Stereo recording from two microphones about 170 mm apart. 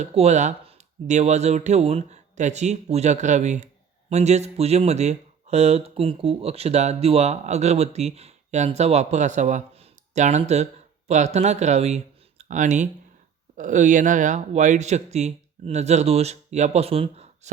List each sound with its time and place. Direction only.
0.0 s speech: 40° right (ahead or behind)